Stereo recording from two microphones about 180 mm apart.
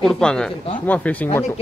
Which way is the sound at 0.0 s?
5° left (ahead or behind).